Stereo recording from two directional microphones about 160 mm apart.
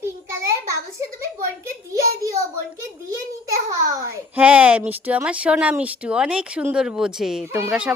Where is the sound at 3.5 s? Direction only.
20° right (ahead or behind).